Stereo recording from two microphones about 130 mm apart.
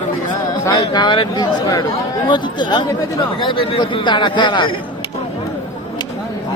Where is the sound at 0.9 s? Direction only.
35° left (ahead or behind).